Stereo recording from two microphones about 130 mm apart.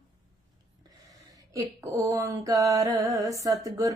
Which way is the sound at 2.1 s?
25° right (ahead or behind).